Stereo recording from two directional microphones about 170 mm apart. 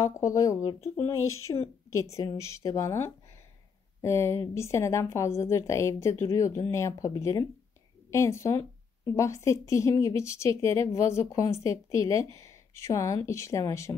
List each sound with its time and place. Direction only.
0.0 s speech: 20° left (ahead or behind)